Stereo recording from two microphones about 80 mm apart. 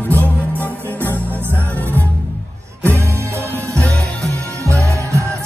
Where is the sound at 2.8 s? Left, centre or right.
Right.